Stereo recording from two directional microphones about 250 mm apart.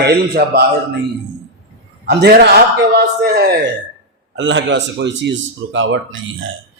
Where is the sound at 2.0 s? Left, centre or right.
Right.